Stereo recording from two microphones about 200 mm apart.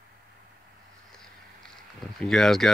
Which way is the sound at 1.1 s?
5° left (ahead or behind).